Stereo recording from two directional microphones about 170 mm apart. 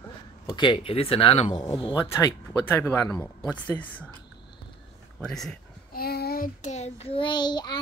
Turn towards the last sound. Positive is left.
turn(degrees=25)  # may be behind; listen again after turning